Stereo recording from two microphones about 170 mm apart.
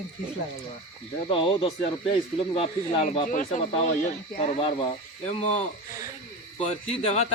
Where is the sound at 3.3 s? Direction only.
50° left (ahead or behind).